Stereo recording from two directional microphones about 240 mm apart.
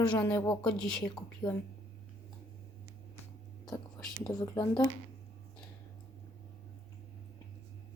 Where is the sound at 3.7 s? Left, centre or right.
Centre.